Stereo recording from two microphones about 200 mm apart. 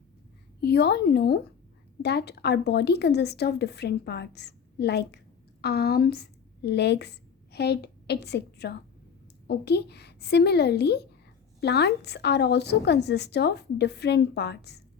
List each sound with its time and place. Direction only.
0.6 s a woman's voice: 55° left (ahead or behind)